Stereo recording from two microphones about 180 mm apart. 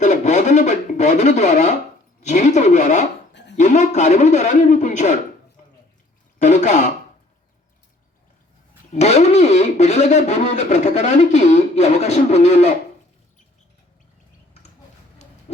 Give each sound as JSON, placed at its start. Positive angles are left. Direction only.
{"t": 0.0, "sound": "a sound", "side_deg": 40}
{"t": 2.2, "sound": "speech", "side_deg": 40}
{"t": 3.3, "sound": "dog", "side_deg": 75}
{"t": 3.6, "sound": "speech", "side_deg": 40}
{"t": 6.4, "sound": "speech", "side_deg": 40}
{"t": 8.9, "sound": "speech", "side_deg": 35}
{"t": 15.5, "sound": "a sound", "side_deg": 35}